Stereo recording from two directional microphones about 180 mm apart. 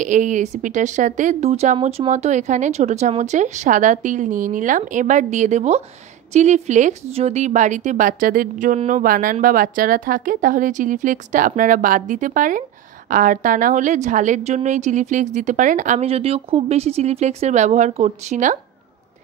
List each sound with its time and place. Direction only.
0.0 s a woman's voice: 45° right (ahead or behind)